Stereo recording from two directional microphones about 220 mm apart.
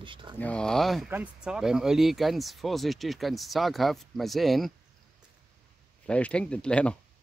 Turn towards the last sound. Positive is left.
turn(degrees=5)  # may be behind; listen again after turning